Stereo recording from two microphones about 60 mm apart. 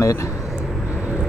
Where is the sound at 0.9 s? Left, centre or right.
Right.